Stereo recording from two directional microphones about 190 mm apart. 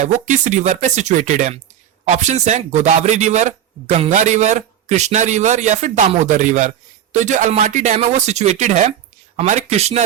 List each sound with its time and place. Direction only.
0.0 s a man's voice: 40° right (ahead or behind)